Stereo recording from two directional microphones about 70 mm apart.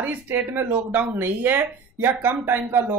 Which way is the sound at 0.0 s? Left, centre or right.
Right.